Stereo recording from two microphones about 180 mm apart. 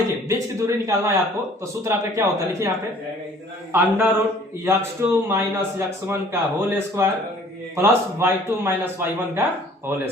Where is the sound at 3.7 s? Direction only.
10° right (ahead or behind).